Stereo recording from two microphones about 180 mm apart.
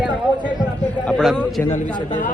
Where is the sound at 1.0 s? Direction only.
Centre (ahead or behind).